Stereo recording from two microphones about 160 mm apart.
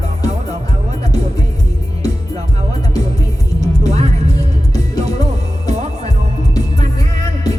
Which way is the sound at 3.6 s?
45° right (ahead or behind).